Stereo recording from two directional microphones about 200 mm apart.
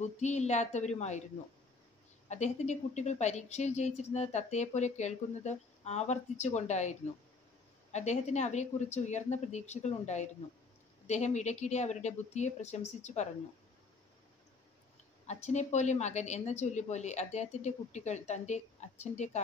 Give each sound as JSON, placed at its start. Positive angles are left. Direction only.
{"t": 0.0, "sound": "a woman's voice", "side_deg": 35}
{"t": 2.2, "sound": "a woman's voice", "side_deg": 35}
{"t": 15.2, "sound": "a woman's voice", "side_deg": 35}